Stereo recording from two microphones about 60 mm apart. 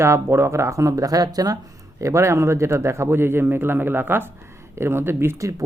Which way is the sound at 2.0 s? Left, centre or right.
Right.